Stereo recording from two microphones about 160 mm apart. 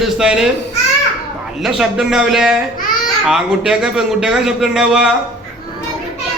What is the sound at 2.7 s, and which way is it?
Babbling, 60° left (ahead or behind).